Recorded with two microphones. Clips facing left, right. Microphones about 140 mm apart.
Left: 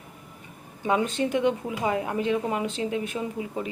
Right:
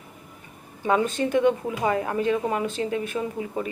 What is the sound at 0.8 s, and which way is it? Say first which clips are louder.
Speech: right 2 dB; 15° left (ahead or behind).